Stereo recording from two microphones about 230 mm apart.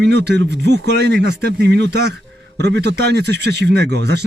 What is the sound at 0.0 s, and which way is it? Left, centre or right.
A man's voice, right.